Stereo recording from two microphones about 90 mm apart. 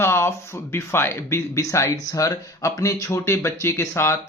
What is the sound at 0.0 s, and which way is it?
Speech, 30° left (ahead or behind).